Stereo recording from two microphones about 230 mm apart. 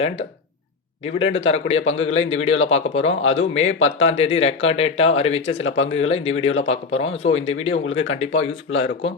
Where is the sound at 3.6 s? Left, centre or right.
Left.